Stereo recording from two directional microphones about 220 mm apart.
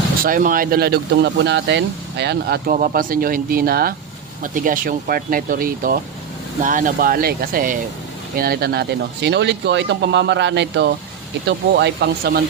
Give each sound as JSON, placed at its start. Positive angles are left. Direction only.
{"t": 0.3, "sound": "speech", "side_deg": -40}